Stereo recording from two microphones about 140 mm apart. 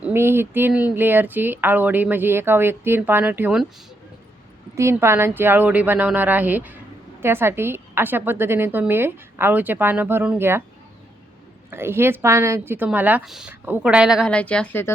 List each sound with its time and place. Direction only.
0.0 s speech: 15° right (ahead or behind)
4.7 s speech: 20° right (ahead or behind)
11.7 s speech: 15° right (ahead or behind)
14.3 s speech: 10° left (ahead or behind)